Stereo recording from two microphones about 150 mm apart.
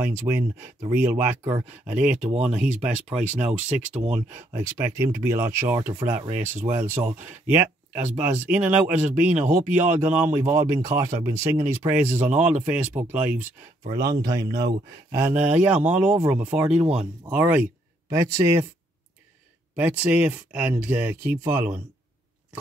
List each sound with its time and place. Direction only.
0.0 s speech: 15° right (ahead or behind)
2.1 s speech: 50° right (ahead or behind)
3.2 s speech: 10° right (ahead or behind)
13.8 s speech: 25° right (ahead or behind)
19.7 s speech: 10° right (ahead or behind)